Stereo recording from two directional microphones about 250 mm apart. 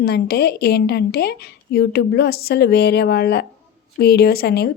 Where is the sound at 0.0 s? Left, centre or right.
Left.